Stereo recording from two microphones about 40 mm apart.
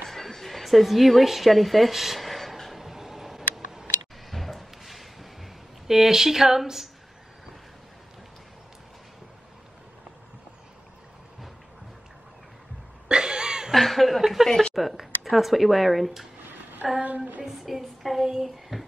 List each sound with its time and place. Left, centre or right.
0.0 s music: centre
4.3 s a sound: centre
13.1 s cough: right
13.7 s speech: centre
14.7 s child singing: centre
16.8 s a sound: centre
17.5 s child singing: centre